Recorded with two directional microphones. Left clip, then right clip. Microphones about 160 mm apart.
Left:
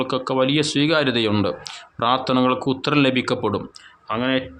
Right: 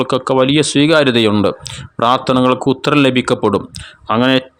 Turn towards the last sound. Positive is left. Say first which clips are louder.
# right 9 dB
turn(degrees=-65)  # may be behind; listen again after turning